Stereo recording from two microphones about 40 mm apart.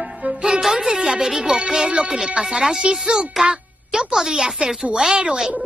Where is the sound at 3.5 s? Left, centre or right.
Centre.